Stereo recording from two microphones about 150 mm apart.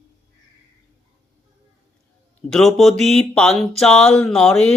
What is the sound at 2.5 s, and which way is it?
Speech, centre (ahead or behind).